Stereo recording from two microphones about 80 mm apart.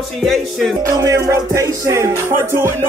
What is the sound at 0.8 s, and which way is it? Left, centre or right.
Music, right.